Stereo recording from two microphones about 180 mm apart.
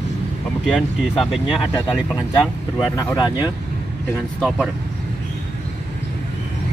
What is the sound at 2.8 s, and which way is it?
Speech, 20° left (ahead or behind).